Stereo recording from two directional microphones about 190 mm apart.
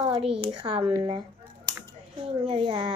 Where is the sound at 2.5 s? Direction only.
25° right (ahead or behind).